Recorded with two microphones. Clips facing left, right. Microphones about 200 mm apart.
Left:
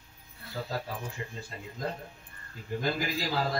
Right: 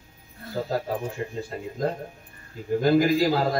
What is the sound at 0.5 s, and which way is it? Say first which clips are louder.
Speech: right 8 dB; 45° right (ahead or behind).